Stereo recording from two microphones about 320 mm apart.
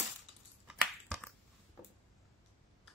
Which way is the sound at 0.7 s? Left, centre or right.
Centre.